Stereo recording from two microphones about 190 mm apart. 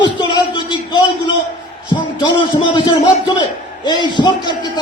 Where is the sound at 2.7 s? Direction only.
25° left (ahead or behind).